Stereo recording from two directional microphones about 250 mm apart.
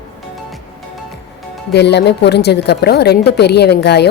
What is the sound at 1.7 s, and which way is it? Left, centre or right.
A woman's voice, left.